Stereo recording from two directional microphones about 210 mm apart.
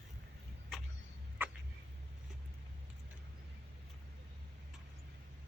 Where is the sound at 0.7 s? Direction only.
Centre (ahead or behind).